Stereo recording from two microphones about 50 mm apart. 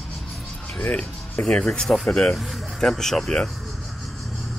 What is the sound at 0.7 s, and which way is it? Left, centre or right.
Speech, centre.